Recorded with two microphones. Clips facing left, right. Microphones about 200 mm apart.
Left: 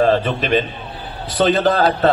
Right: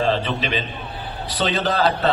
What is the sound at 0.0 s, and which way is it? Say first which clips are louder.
A man's voice: left 5 dB; 50° left (ahead or behind).